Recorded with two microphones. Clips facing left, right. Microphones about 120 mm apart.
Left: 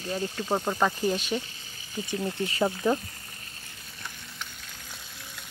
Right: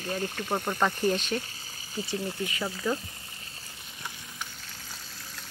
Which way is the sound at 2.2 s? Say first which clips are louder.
Left 5 dB; 30° left (ahead or behind).